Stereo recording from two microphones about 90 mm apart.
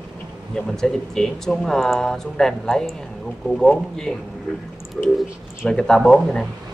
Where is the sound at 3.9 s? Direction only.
5° left (ahead or behind).